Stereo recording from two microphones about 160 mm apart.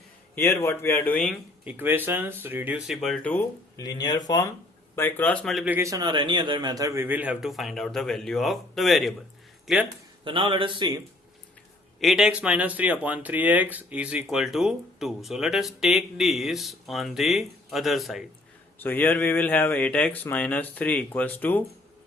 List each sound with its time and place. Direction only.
0.3 s speech: 15° left (ahead or behind)
1.6 s a man's voice: 10° right (ahead or behind); by 3.4 s 5° left (ahead or behind)
3.8 s speech: 25° left (ahead or behind)
4.9 s speech: 10° left (ahead or behind)
5.6 s a man's voice: 15° right (ahead or behind)
10.2 s speech: 30° right (ahead or behind)
11.9 s speech: centre (ahead or behind)
18.8 s speech: 10° left (ahead or behind)